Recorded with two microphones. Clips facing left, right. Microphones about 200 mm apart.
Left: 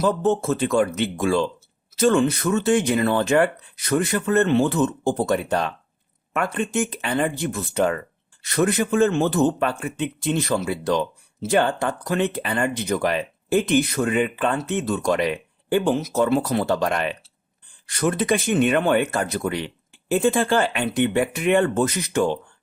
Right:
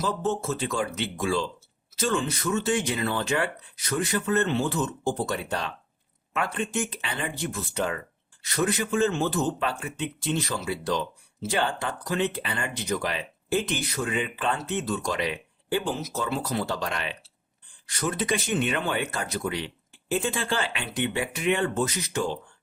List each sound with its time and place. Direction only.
0.0 s speech: 55° left (ahead or behind)